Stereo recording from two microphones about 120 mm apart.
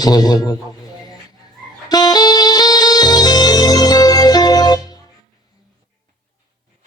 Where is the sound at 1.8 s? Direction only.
35° left (ahead or behind).